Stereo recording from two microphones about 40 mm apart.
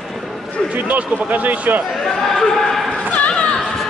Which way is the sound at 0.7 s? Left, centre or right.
Right.